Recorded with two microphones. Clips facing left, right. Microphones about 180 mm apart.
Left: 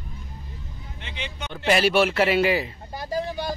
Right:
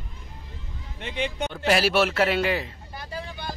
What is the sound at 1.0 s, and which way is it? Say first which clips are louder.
Speech: right 8 dB; 50° right (ahead or behind).